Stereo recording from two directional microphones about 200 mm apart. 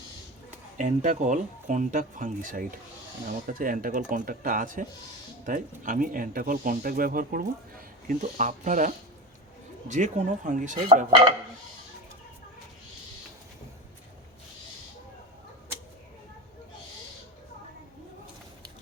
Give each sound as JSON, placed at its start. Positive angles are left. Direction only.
{"t": 0.8, "sound": "speech", "side_deg": -35}